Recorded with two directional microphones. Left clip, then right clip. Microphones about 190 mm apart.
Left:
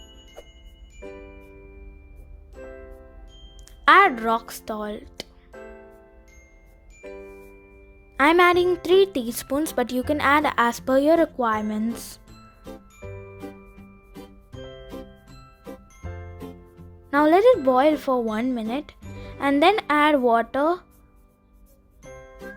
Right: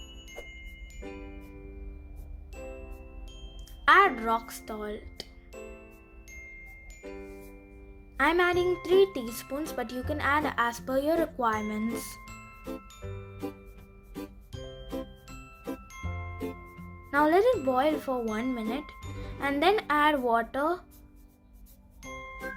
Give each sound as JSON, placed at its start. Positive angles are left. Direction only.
{"t": 0.0, "sound": "music", "side_deg": 0}
{"t": 3.8, "sound": "a woman's voice", "side_deg": 40}
{"t": 7.0, "sound": "music", "side_deg": 5}
{"t": 8.1, "sound": "a woman's voice", "side_deg": 40}
{"t": 17.1, "sound": "a woman's voice", "side_deg": 35}